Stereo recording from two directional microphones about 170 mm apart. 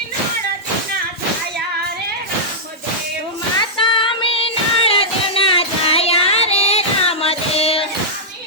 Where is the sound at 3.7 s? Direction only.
30° left (ahead or behind).